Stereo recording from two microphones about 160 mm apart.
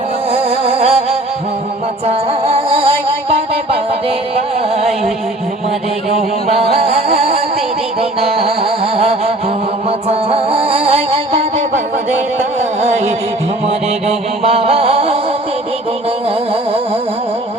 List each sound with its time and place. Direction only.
0.3 s music: 40° right (ahead or behind)
2.0 s music: 35° right (ahead or behind)
6.1 s music: 40° right (ahead or behind)
16.5 s a sound: 35° right (ahead or behind)